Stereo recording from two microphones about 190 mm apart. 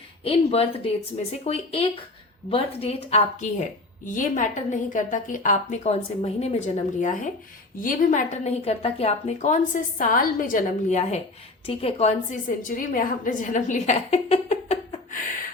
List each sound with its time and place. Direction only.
0.3 s a woman's voice: 30° left (ahead or behind)